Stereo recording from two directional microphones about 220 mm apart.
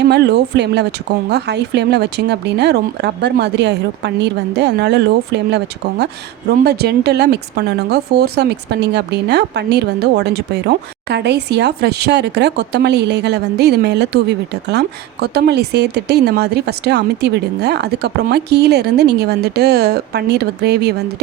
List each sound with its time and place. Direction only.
0.0 s speech: 50° right (ahead or behind)